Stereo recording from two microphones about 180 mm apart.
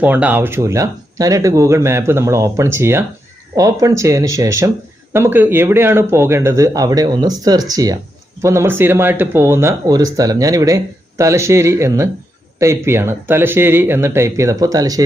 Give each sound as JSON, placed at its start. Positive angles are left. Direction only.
{"t": 0.0, "sound": "speech", "side_deg": -10}